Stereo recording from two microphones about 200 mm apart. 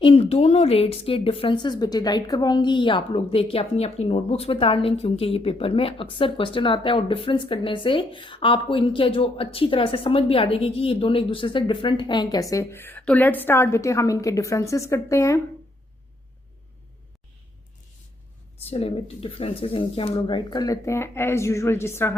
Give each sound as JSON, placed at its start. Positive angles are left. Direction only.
{"t": 0.0, "sound": "speech", "side_deg": 30}
{"t": 18.6, "sound": "speech", "side_deg": 30}